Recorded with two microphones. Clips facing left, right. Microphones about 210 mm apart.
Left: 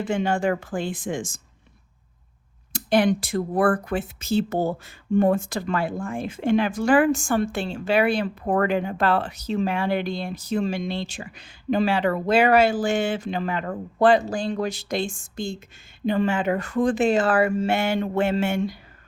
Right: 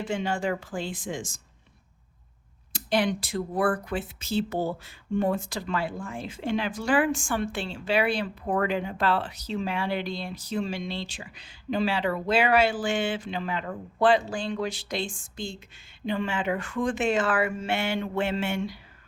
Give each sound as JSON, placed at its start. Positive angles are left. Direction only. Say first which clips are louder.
{"t": 0.0, "sound": "speech", "louder": "left 5 dB", "side_deg": 50}
{"t": 2.7, "sound": "speech", "louder": "left 6 dB", "side_deg": 50}